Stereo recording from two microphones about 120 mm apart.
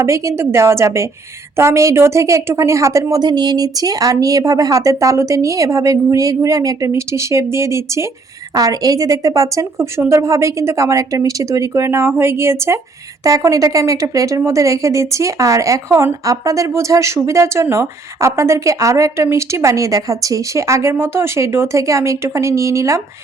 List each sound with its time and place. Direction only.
0.0 s a woman's voice: 25° right (ahead or behind)